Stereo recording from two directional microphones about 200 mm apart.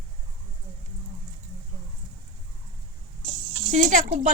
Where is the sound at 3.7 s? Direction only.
35° right (ahead or behind).